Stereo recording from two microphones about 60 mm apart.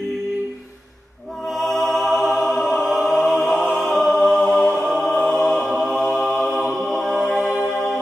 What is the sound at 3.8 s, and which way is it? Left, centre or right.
Choir, centre.